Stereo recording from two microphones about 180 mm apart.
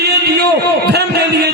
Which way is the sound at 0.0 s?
65° right (ahead or behind).